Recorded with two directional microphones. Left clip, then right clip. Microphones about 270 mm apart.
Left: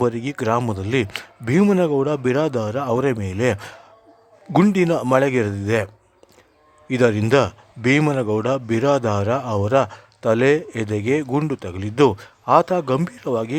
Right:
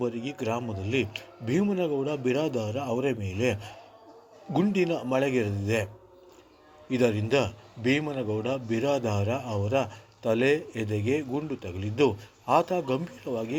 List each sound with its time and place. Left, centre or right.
0.0 s a man's voice: left
6.9 s a man's voice: left